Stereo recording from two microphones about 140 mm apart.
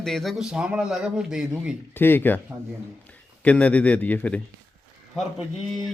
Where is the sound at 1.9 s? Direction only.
15° left (ahead or behind).